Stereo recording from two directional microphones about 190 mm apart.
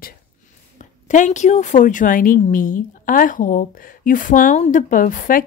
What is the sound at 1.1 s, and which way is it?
Speech, 40° left (ahead or behind).